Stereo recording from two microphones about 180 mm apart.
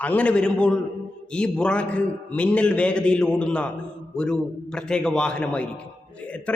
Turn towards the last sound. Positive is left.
turn(degrees=5)  # may be behind; listen again after turning